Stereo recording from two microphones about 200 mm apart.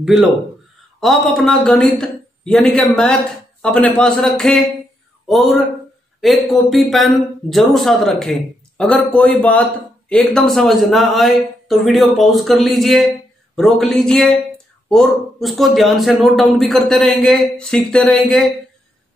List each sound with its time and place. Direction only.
0.0 s speech: 5° right (ahead or behind)